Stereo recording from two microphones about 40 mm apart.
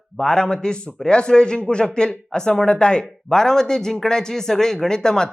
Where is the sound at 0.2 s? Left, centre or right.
Centre.